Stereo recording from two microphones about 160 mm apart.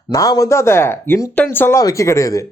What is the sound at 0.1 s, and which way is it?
Speech, 20° left (ahead or behind).